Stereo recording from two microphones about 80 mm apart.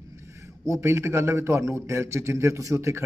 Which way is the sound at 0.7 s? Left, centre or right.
Right.